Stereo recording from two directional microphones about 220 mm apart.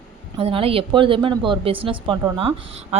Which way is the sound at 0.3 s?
25° right (ahead or behind).